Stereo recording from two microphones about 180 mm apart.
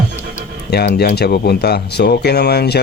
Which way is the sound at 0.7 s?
65° left (ahead or behind).